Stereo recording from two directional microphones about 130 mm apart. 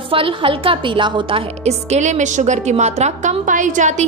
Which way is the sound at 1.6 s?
60° right (ahead or behind).